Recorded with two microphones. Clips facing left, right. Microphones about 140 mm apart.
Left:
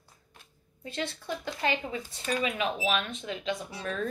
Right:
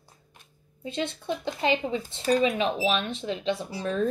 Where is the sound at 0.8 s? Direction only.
20° right (ahead or behind).